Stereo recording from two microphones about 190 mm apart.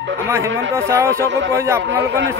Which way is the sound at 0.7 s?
15° right (ahead or behind).